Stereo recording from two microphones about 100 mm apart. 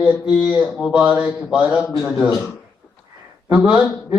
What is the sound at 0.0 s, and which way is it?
Mantra, 10° right (ahead or behind).